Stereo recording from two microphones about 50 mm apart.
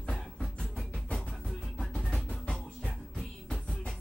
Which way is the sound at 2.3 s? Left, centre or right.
Left.